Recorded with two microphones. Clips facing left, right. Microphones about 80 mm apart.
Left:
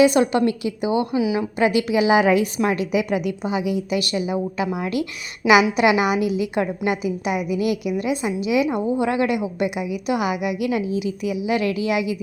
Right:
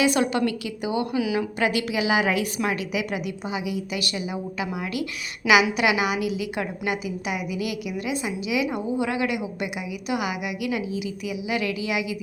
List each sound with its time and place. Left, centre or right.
0.0 s a woman's voice: left